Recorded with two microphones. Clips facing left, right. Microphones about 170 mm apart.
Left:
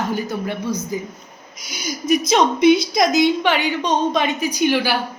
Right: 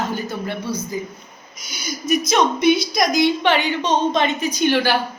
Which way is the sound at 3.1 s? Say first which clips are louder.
Even; 15° left (ahead or behind).